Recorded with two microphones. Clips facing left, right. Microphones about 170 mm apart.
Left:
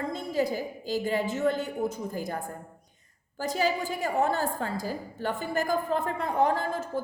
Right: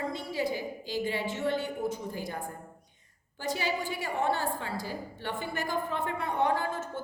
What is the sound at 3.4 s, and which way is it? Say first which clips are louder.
A woman's voice: left 4 dB; 40° left (ahead or behind).